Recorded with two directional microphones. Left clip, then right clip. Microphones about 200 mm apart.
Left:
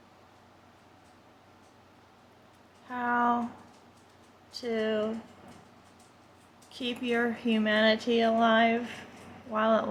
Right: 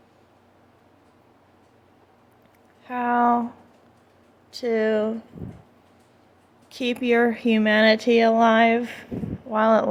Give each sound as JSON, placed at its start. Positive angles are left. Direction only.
{"t": 2.8, "sound": "a sound", "side_deg": -40}
{"t": 4.5, "sound": "speech", "side_deg": -40}
{"t": 6.7, "sound": "speech", "side_deg": -40}